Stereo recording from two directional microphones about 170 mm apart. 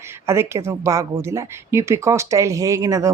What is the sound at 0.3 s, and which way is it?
A woman's voice, 15° right (ahead or behind).